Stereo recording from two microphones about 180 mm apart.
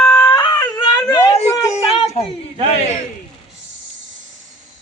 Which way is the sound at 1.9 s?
30° left (ahead or behind).